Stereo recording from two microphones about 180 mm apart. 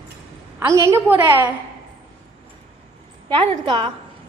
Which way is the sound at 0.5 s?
15° right (ahead or behind).